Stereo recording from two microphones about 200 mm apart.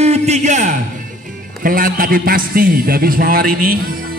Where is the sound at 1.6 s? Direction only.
45° right (ahead or behind).